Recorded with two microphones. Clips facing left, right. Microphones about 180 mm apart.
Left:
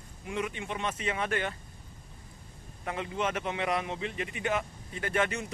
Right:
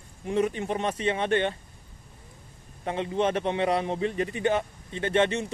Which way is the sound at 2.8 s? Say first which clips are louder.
Right 6 dB; 30° right (ahead or behind).